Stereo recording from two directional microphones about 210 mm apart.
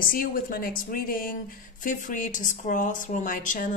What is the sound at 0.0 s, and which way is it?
Speech, 40° left (ahead or behind).